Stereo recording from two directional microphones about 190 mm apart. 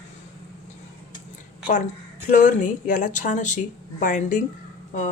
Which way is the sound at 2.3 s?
45° left (ahead or behind).